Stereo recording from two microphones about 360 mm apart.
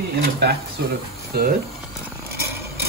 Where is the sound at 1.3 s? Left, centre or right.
Right.